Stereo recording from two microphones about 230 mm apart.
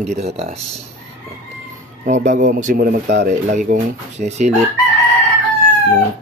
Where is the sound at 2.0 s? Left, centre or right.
Right.